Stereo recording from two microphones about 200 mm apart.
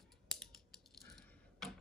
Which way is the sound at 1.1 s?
Centre (ahead or behind).